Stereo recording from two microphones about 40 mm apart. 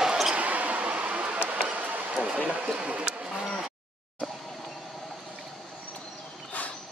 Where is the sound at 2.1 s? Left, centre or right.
Right.